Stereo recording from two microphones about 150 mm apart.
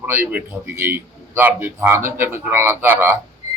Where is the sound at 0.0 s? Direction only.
10° right (ahead or behind).